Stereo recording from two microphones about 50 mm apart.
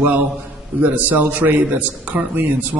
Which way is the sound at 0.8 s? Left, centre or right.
Right.